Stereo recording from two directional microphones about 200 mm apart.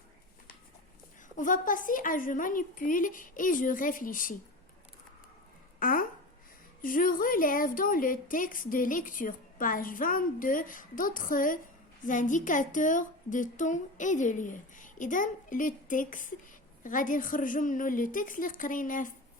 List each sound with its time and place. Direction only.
1.4 s a woman's voice: 40° left (ahead or behind)
5.8 s a sound: 45° left (ahead or behind)
6.8 s a woman's voice: 45° left (ahead or behind)